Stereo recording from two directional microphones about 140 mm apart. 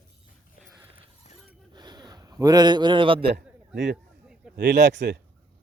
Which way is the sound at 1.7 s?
30° right (ahead or behind).